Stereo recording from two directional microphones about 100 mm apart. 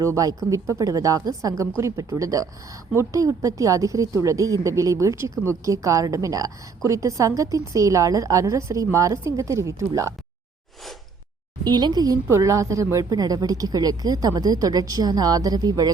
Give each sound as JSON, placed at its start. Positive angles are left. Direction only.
{"t": 0.0, "sound": "a woman's voice", "side_deg": -35}
{"t": 11.6, "sound": "a woman's voice", "side_deg": -45}